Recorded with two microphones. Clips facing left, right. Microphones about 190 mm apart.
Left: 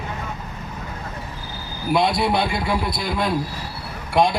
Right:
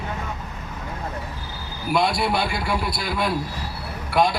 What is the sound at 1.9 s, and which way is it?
A man's voice, centre (ahead or behind).